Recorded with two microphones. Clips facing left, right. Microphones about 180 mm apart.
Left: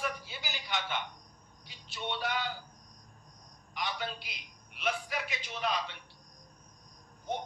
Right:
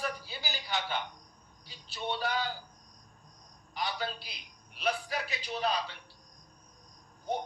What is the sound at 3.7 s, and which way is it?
A man's voice, 35° right (ahead or behind).